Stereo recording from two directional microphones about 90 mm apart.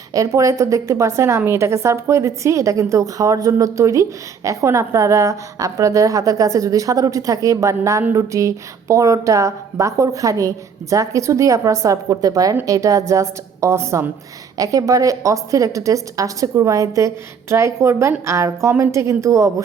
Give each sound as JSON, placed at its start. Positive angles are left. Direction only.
{"t": 0.1, "sound": "a woman's voice", "side_deg": -35}